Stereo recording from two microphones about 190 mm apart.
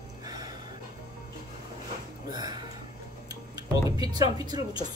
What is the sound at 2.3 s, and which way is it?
Music, 20° right (ahead or behind).